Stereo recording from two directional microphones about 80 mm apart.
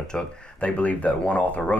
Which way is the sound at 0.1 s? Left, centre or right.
Centre.